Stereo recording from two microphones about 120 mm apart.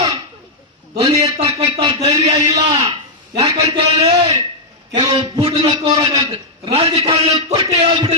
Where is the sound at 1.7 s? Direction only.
45° right (ahead or behind).